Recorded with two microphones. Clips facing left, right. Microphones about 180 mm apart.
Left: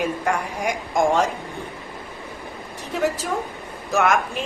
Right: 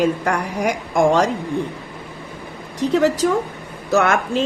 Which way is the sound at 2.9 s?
80° right.